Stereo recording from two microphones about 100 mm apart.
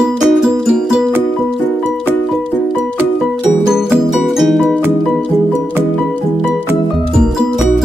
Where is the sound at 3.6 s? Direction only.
5° right (ahead or behind).